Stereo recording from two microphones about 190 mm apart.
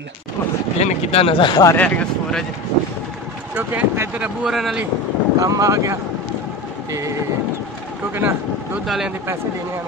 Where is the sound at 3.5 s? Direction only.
10° right (ahead or behind).